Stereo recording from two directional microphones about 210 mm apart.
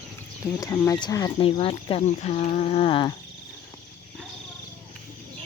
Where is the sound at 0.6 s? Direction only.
15° left (ahead or behind).